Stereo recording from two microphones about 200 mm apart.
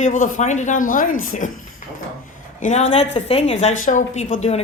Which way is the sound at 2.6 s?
35° left (ahead or behind).